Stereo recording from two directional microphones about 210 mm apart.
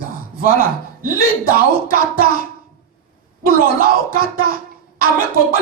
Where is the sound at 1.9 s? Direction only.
45° right (ahead or behind).